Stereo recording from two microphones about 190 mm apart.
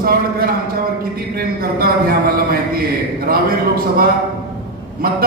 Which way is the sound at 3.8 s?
50° right (ahead or behind).